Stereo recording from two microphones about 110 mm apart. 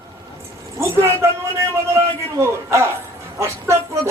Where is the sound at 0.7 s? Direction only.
25° right (ahead or behind).